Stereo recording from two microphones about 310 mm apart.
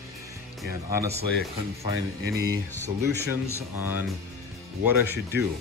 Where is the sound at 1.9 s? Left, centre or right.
Right.